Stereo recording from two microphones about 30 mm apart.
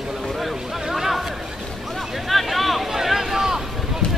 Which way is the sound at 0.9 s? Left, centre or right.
Centre.